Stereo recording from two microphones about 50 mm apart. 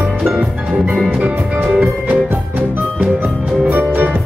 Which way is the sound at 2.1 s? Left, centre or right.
Right.